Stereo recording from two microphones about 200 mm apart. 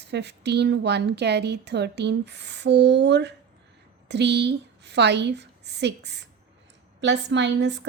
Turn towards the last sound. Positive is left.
turn(degrees=-60)  # may be behind; listen again after turning